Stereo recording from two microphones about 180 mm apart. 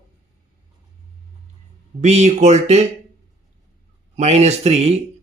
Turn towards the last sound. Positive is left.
turn(degrees=-35)  # may be behind; listen again after turning